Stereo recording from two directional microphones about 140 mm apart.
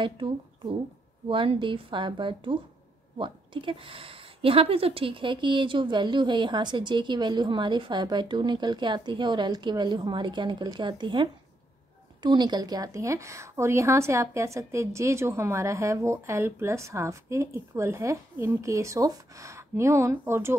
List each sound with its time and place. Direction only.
1.3 s a woman's voice: 35° right (ahead or behind); by 20.5 s 20° right (ahead or behind)